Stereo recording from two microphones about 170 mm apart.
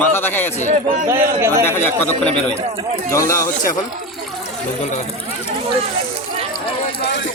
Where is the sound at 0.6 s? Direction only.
50° right (ahead or behind).